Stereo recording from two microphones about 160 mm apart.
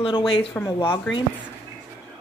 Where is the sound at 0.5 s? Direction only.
15° left (ahead or behind).